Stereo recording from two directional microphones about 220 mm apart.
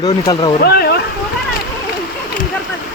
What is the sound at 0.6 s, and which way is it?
Speech, 45° left (ahead or behind).